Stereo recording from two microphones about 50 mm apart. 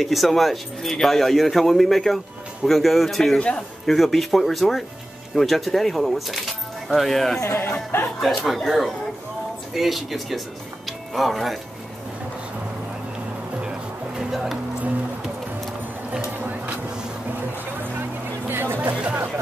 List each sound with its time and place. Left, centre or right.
0.0 s speech: centre
3.3 s a man's voice: left
3.8 s speech: centre
7.4 s speech: left
8.2 s speech: centre
13.6 s music: centre
16.3 s vehicle: right
18.5 s music: right